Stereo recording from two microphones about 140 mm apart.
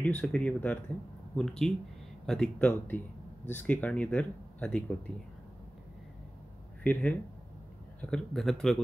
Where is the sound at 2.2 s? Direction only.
5° left (ahead or behind).